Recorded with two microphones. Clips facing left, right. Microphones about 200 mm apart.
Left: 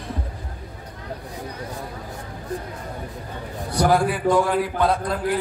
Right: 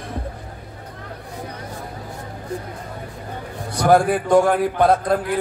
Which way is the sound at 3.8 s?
50° right (ahead or behind).